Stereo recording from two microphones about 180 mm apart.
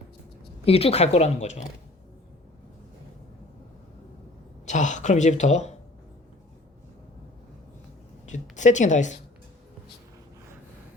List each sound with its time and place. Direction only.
0.6 s speech: 35° left (ahead or behind)
4.6 s speech: 40° left (ahead or behind)
8.3 s speech: 40° left (ahead or behind)